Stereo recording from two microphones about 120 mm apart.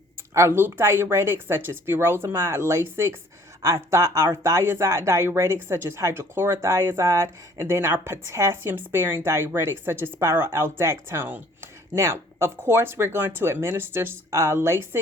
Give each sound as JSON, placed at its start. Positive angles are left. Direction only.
{"t": 0.3, "sound": "speech", "side_deg": -20}